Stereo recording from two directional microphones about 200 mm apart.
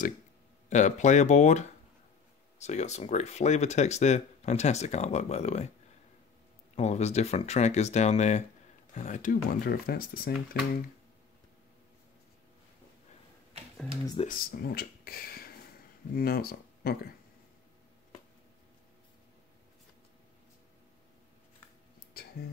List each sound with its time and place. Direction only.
0.7 s speech: 35° left (ahead or behind)
6.7 s speech: 35° left (ahead or behind); by 10.7 s 50° left (ahead or behind)
14.2 s speech: 45° left (ahead or behind)
22.2 s a sound: 50° left (ahead or behind)